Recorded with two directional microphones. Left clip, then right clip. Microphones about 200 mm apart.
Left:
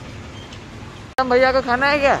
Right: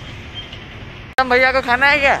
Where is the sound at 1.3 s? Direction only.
20° left (ahead or behind).